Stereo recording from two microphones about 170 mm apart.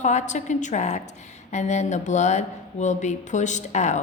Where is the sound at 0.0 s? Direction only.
45° left (ahead or behind).